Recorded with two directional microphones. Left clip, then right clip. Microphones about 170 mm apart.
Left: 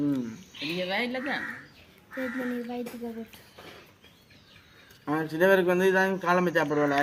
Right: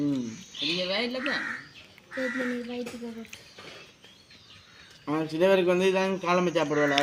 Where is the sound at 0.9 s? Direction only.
15° left (ahead or behind).